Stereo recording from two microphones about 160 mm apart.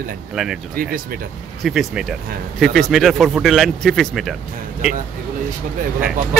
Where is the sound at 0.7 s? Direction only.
65° right (ahead or behind).